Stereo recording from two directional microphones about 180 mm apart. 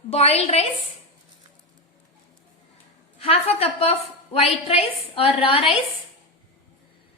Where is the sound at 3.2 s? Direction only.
35° left (ahead or behind).